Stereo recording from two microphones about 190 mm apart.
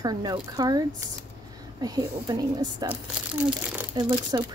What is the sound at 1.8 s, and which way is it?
Speech, 20° right (ahead or behind).